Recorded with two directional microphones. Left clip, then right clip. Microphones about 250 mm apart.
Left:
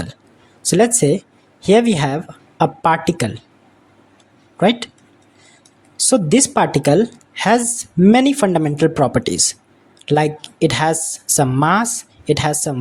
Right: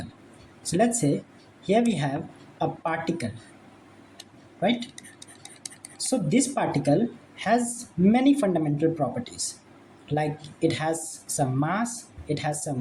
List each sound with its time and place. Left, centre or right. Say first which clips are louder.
0.7 s speech: left 10 dB; left
4.6 s speech: left 10 dB; left
6.1 s speech: left 10 dB; left